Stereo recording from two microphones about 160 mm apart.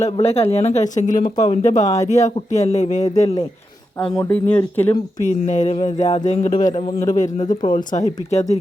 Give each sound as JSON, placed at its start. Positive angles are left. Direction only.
{"t": 0.0, "sound": "speech", "side_deg": 40}
{"t": 4.3, "sound": "speech", "side_deg": 10}
{"t": 5.2, "sound": "speech", "side_deg": 50}